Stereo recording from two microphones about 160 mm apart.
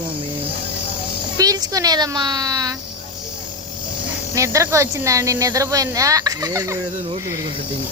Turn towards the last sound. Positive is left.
turn(degrees=-20)  # may be behind; listen again after turning